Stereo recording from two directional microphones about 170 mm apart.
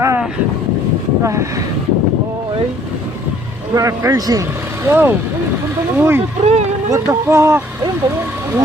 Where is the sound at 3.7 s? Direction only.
20° right (ahead or behind).